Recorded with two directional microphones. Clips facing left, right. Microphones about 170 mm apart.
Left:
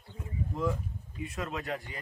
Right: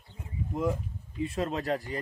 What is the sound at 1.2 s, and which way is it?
Speech, 30° right (ahead or behind).